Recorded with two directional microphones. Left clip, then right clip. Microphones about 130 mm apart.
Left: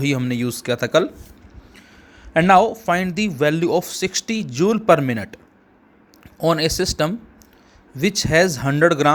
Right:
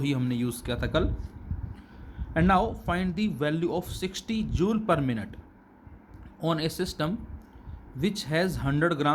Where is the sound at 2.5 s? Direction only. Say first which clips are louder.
Left 11 dB; 40° left (ahead or behind).